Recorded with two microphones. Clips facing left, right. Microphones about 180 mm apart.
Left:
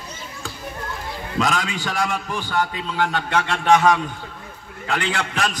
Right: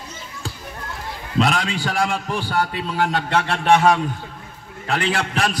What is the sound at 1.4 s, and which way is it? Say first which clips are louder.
A man's voice: right 3 dB; 30° right (ahead or behind).